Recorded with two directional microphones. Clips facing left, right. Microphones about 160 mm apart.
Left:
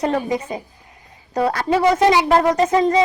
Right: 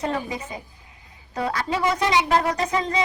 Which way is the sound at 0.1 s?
40° left (ahead or behind).